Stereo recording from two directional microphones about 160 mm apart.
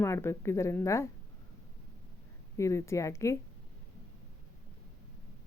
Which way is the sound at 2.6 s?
20° left (ahead or behind).